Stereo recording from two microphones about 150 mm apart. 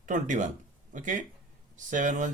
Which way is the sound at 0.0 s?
60° right (ahead or behind).